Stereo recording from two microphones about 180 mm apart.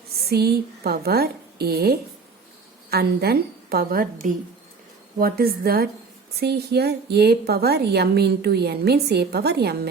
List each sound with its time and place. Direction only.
0.3 s a woman's voice: 60° right (ahead or behind)